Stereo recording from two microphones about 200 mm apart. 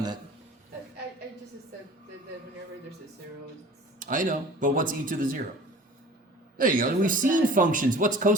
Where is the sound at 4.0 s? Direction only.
40° right (ahead or behind).